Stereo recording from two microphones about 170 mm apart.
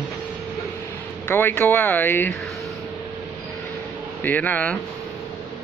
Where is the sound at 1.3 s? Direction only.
10° left (ahead or behind).